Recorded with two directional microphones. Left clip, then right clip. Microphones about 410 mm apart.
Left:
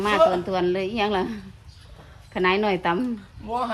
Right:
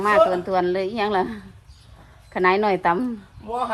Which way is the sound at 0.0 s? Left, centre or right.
Centre.